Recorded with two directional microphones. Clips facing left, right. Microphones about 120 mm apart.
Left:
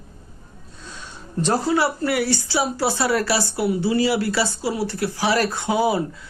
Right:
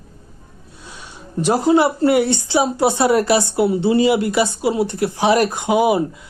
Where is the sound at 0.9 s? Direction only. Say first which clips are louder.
Right 1 dB; 15° right (ahead or behind).